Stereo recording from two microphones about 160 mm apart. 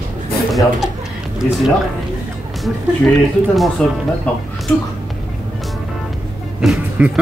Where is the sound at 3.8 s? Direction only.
5° left (ahead or behind).